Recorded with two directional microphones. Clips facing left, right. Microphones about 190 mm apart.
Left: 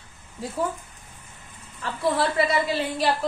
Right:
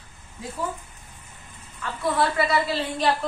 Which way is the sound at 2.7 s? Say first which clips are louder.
Left 1 dB; 10° left (ahead or behind).